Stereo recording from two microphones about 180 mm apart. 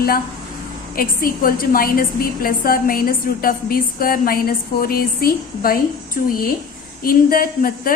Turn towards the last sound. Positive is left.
turn(degrees=50)  # may be behind; listen again after turning